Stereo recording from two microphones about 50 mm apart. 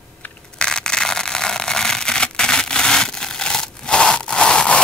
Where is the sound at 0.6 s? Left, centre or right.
Centre.